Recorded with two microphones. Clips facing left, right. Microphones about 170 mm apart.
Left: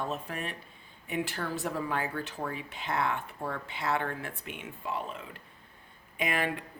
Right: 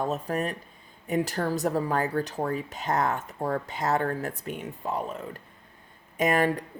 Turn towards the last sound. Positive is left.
turn(degrees=-40)  # may be behind; listen again after turning